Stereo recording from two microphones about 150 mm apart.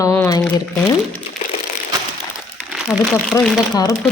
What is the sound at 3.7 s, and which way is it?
Speech, 25° left (ahead or behind).